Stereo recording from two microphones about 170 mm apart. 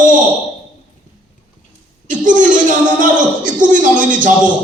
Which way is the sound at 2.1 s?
50° right (ahead or behind).